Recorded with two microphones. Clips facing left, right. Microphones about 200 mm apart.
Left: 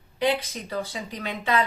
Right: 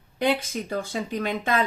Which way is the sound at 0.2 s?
50° right (ahead or behind).